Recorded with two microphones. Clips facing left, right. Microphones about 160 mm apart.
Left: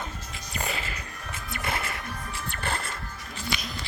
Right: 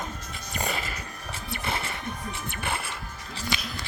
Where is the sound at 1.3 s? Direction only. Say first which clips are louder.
Even; 30° right (ahead or behind).